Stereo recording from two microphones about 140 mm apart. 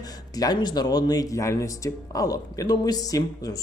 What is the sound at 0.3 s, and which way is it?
Speech, 30° left (ahead or behind).